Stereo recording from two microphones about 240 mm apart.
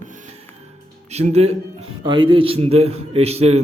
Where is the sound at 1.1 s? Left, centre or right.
Right.